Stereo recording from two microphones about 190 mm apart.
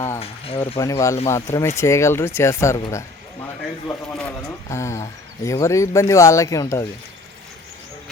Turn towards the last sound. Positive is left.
turn(degrees=15)  # may be behind; listen again after turning